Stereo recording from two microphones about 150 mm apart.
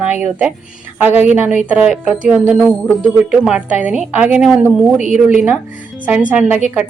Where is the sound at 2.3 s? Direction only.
5° right (ahead or behind).